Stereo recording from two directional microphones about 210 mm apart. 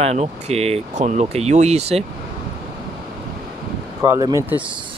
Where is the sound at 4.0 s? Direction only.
15° right (ahead or behind).